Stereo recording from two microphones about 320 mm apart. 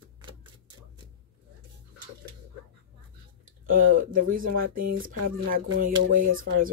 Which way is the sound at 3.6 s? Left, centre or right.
Right.